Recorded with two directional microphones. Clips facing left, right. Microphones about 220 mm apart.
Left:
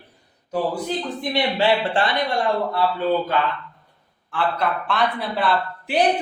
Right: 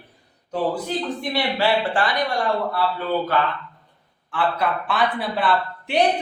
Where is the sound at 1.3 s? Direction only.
20° left (ahead or behind).